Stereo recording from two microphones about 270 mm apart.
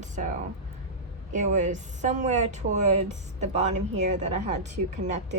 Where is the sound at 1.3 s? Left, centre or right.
Right.